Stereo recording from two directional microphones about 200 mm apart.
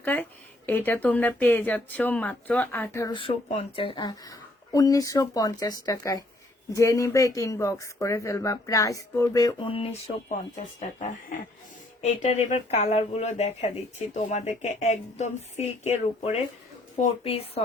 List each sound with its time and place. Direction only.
0.0 s speech: 10° left (ahead or behind); by 10.3 s 30° left (ahead or behind)
10.3 s speech: 40° left (ahead or behind)
12.2 s a woman's voice: 35° left (ahead or behind)